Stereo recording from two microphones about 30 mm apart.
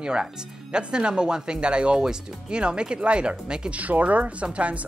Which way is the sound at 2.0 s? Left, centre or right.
Right.